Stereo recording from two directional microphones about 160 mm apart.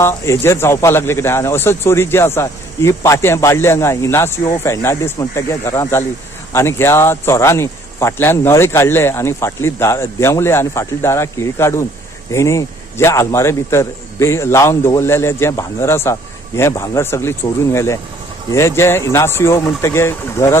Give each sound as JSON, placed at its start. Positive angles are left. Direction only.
{"t": 0.0, "sound": "speech", "side_deg": 15}